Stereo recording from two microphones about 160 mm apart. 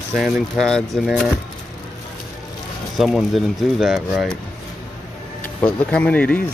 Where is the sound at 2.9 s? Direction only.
Centre (ahead or behind).